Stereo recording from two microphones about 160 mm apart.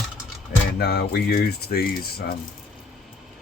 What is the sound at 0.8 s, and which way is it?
Speech, 85° left.